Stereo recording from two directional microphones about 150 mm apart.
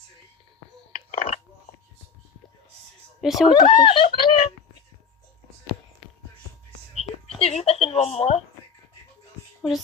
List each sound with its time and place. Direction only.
1.1 s a sound: 40° left (ahead or behind)
3.2 s speech: centre (ahead or behind)
3.5 s speech: 35° left (ahead or behind)
7.3 s a woman's voice: 40° left (ahead or behind)